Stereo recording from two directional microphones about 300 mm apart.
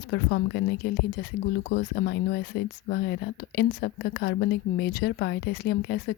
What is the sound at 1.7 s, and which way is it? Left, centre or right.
Speech, left.